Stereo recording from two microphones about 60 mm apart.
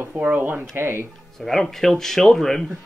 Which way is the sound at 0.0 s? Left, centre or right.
Right.